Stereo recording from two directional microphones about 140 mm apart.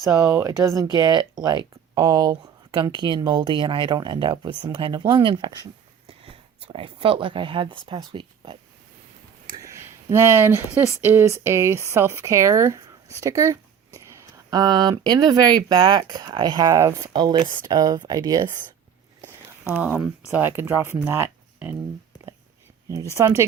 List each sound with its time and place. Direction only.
0.0 s speech: 25° right (ahead or behind)
6.1 s speech: 45° right (ahead or behind)
9.5 s speech: 20° right (ahead or behind)
17.1 s speech: 35° right (ahead or behind)
19.7 s speech: 10° right (ahead or behind)
21.1 s a sound: 15° right (ahead or behind)
23.1 s speech: 20° right (ahead or behind)